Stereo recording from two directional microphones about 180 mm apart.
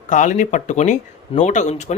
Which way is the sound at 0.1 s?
45° left (ahead or behind).